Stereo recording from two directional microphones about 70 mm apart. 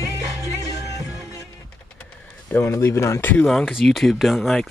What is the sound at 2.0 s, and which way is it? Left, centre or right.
Vehicle, left.